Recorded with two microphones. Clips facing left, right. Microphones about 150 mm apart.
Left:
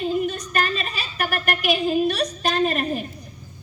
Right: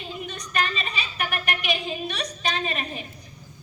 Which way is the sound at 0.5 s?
50° left (ahead or behind).